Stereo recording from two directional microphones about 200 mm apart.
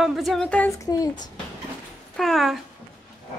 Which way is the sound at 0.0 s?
Centre (ahead or behind).